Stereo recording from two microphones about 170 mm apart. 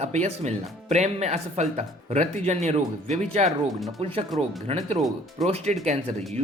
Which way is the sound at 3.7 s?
Centre (ahead or behind).